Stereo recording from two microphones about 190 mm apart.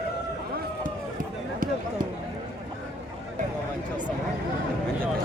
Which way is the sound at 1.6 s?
45° right (ahead or behind).